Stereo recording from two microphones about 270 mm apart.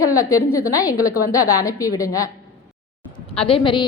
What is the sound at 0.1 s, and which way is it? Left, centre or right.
A woman's voice, centre.